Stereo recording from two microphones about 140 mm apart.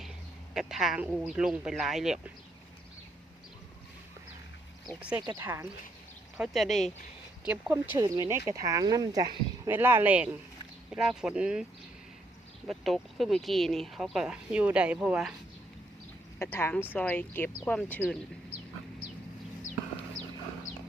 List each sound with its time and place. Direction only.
0.5 s speech: 5° right (ahead or behind)
4.9 s speech: 10° right (ahead or behind)
6.3 s speech: 5° right (ahead or behind)
7.4 s speech: 15° right (ahead or behind)
9.6 s speech: 15° right (ahead or behind)
12.6 s speech: centre (ahead or behind)
16.4 s speech: 15° left (ahead or behind)